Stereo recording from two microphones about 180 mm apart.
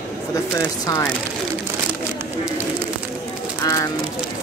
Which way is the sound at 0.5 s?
15° left (ahead or behind).